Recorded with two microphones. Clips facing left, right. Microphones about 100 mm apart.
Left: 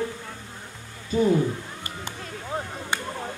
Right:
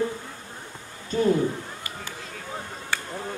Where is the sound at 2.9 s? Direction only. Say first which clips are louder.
Left 1 dB; 20° left (ahead or behind).